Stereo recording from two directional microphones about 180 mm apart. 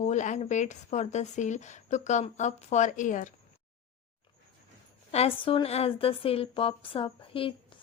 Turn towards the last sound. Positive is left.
turn(degrees=30)  # may be behind; listen again after turning